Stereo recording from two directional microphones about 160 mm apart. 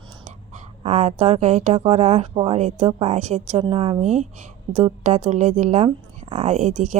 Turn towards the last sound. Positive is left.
turn(degrees=-45)  # may be behind; listen again after turning